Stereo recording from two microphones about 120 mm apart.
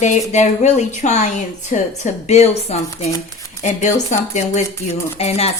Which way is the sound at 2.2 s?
65° left (ahead or behind).